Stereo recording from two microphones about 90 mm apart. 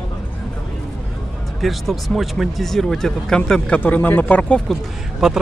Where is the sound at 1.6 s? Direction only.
Centre (ahead or behind).